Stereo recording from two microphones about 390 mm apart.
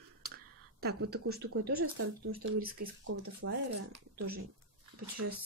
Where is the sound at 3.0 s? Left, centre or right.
Right.